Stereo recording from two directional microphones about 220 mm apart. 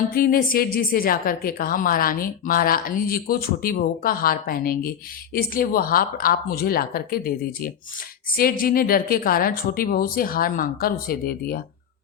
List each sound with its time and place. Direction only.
0.1 s a woman's voice: 40° left (ahead or behind)